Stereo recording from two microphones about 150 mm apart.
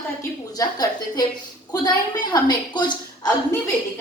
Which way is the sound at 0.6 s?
25° left (ahead or behind).